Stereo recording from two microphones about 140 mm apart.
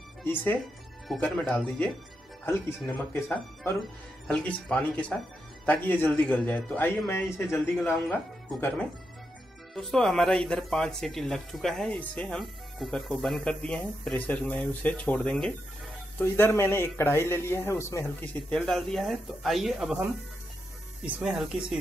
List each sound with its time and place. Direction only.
0.2 s a man's voice: 15° left (ahead or behind); by 21.7 s 5° right (ahead or behind)